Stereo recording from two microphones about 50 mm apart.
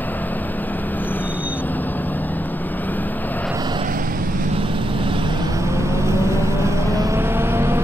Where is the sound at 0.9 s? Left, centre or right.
Left.